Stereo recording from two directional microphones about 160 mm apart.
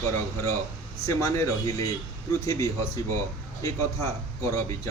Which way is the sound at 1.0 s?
20° left (ahead or behind).